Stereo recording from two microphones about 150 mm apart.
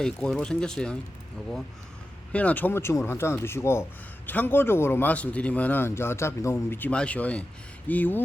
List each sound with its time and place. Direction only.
0.0 s speech: 5° left (ahead or behind)
2.3 s a man's voice: 10° left (ahead or behind)